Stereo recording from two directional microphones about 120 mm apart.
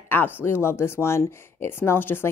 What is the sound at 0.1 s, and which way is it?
Speech, 15° left (ahead or behind).